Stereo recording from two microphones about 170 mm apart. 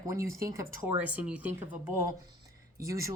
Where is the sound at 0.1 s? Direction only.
15° right (ahead or behind).